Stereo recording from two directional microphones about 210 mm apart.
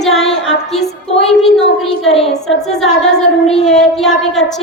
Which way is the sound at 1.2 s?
Centre (ahead or behind).